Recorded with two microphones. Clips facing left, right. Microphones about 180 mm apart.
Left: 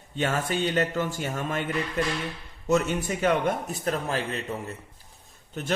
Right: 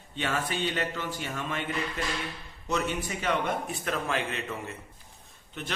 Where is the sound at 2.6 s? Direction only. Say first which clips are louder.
Left 6 dB; 45° left (ahead or behind).